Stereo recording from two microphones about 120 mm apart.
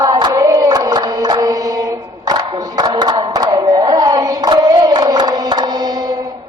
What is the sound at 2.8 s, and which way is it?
Hands, 35° right (ahead or behind).